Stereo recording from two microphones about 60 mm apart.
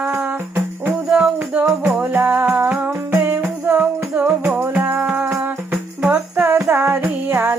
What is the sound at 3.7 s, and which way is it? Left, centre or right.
Music, right.